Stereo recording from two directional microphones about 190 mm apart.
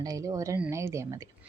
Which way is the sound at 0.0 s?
20° right (ahead or behind).